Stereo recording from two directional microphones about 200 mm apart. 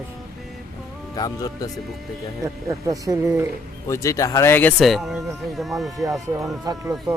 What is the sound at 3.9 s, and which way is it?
Speech, 15° left (ahead or behind).